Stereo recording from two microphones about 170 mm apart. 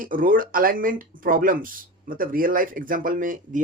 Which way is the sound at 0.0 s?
55° right (ahead or behind).